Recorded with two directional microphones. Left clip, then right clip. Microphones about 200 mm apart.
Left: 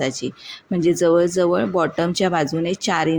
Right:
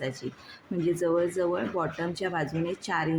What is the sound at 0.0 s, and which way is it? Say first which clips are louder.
Speech: left 10 dB; 40° left (ahead or behind).